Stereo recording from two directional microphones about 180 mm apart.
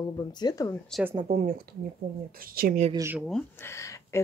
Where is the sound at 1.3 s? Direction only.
40° right (ahead or behind).